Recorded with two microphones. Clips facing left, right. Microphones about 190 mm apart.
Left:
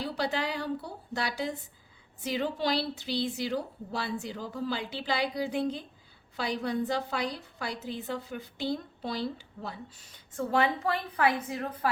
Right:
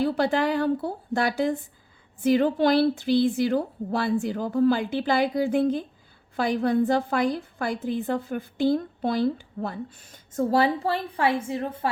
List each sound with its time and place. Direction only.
0.0 s a woman's voice: 50° right (ahead or behind); by 11.9 s 25° right (ahead or behind)